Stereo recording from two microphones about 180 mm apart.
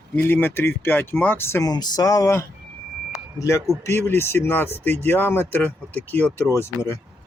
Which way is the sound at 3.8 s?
15° left (ahead or behind).